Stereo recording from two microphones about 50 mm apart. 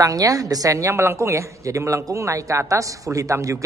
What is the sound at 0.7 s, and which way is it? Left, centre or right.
A man's voice, right.